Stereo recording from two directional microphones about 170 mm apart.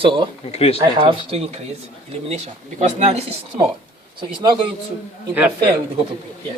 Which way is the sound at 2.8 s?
40° right (ahead or behind).